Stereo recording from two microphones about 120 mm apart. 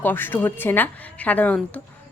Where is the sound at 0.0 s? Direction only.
15° left (ahead or behind).